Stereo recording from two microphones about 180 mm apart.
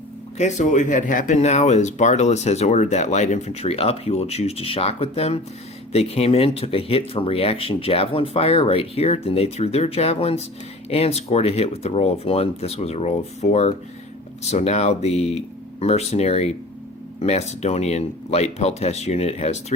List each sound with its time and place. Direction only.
0.3 s speech: 40° left (ahead or behind)